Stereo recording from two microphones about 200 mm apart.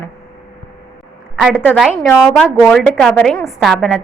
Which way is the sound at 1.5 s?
10° left (ahead or behind).